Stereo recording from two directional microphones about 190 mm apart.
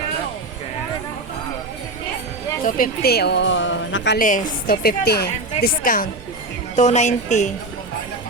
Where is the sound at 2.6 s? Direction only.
45° left (ahead or behind); by 4.2 s 75° left (ahead or behind).